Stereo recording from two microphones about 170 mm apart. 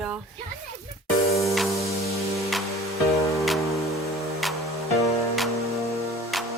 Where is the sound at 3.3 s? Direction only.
Centre (ahead or behind).